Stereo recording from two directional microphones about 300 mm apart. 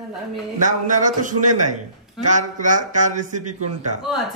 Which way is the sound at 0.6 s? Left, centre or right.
Right.